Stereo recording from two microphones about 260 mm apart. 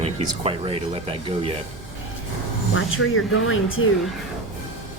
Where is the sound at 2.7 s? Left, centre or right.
Left.